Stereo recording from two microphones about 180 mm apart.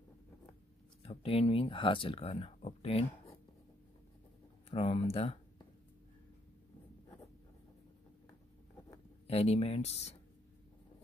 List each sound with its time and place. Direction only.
1.0 s speech: 35° left (ahead or behind)
4.6 s speech: 30° left (ahead or behind)
9.3 s speech: 35° left (ahead or behind)